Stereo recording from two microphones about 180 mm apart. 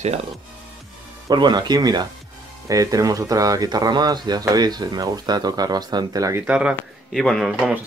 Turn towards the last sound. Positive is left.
turn(degrees=0)  # may be behind; listen again after turning